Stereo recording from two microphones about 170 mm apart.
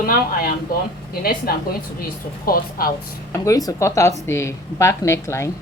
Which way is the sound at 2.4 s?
60° left (ahead or behind).